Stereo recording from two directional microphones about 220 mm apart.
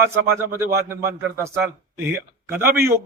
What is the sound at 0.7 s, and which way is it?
Speech, 45° right (ahead or behind).